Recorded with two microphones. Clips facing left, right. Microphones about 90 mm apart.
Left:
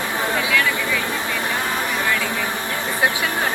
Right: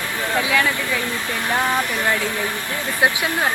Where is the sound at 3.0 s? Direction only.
20° right (ahead or behind).